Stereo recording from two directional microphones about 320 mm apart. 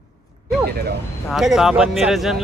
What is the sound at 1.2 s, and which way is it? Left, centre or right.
Speech, centre.